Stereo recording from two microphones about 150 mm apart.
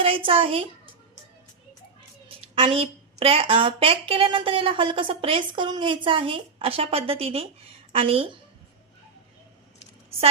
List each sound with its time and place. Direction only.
0.0 s a woman's voice: 35° right (ahead or behind)
2.6 s a woman's voice: 40° right (ahead or behind)